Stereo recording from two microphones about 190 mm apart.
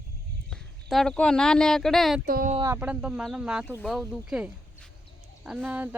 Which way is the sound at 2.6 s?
10° right (ahead or behind).